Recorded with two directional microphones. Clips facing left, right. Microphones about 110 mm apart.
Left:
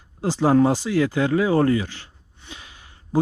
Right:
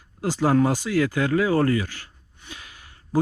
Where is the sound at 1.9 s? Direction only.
15° left (ahead or behind).